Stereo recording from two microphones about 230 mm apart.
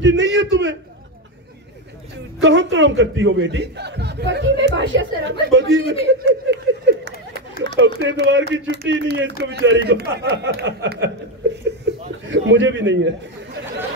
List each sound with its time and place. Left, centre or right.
0.0 s a man's voice: right
2.4 s a man's voice: right
6.1 s a sound: right
7.6 s a man's voice: right
12.3 s a man's voice: right